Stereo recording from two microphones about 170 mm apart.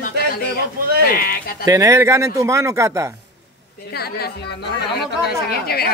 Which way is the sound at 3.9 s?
70° left (ahead or behind).